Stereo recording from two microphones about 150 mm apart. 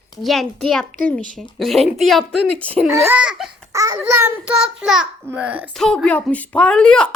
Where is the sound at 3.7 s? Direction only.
20° right (ahead or behind).